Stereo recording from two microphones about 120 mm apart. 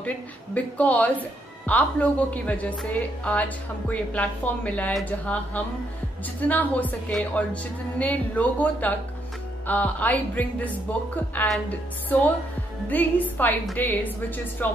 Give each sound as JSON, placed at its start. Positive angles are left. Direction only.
{"t": 0.6, "sound": "a woman's voice", "side_deg": 10}
{"t": 12.9, "sound": "a woman's voice", "side_deg": 15}